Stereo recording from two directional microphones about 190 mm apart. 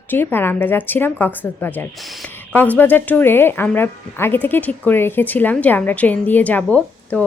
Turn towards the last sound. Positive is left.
turn(degrees=5)  # may be behind; listen again after turning